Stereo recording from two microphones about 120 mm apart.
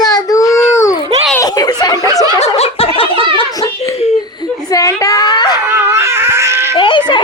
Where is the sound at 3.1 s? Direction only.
45° right (ahead or behind).